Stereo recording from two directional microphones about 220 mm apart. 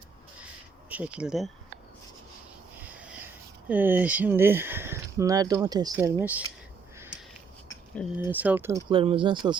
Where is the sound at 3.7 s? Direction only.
10° right (ahead or behind).